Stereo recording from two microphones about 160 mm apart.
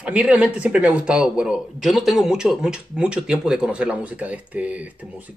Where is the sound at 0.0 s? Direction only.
5° right (ahead or behind).